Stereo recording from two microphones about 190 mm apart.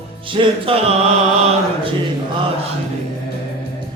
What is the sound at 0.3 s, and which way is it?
Music, 30° right (ahead or behind).